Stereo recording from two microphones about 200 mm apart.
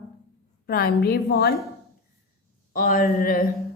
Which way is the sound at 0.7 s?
50° left (ahead or behind).